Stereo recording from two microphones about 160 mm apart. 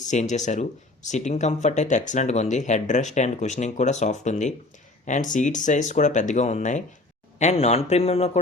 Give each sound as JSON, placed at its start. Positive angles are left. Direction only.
{"t": 0.1, "sound": "a man's voice", "side_deg": 50}